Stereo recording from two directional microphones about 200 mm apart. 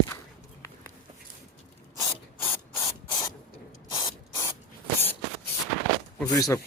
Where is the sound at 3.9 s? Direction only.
15° left (ahead or behind).